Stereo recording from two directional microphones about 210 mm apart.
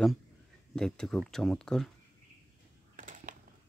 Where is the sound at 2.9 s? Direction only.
40° right (ahead or behind).